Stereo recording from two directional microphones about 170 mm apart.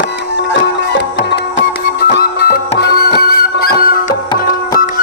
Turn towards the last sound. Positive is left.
turn(degrees=60)  # may be behind; listen again after turning